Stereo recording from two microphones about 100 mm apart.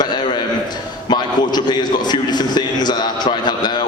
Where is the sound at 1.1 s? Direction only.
45° left (ahead or behind).